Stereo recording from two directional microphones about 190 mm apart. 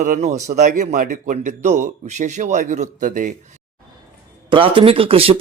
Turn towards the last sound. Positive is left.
turn(degrees=-30)  # may be behind; listen again after turning